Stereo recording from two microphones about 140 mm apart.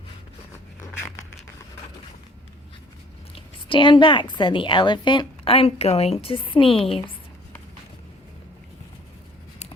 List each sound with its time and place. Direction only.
3.3 s a woman's voice: 35° left (ahead or behind)